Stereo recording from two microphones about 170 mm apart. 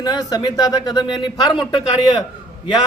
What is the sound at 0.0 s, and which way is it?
A man's voice, 25° left (ahead or behind).